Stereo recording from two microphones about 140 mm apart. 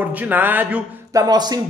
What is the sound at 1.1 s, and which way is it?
Speech, 30° right (ahead or behind).